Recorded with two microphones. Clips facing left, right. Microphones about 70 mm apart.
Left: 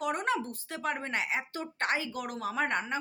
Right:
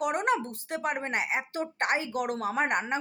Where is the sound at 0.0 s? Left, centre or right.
Right.